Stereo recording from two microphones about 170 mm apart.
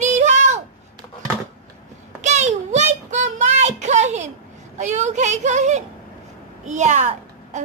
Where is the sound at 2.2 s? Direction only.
45° right (ahead or behind).